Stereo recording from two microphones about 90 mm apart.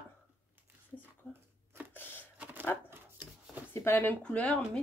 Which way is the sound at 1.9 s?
25° left (ahead or behind).